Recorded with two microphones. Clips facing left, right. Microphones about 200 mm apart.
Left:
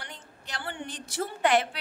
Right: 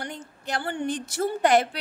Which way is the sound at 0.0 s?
45° right (ahead or behind).